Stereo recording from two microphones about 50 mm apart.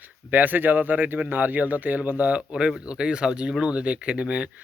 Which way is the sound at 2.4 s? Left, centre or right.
Centre.